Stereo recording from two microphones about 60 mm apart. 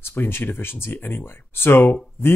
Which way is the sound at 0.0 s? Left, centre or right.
Left.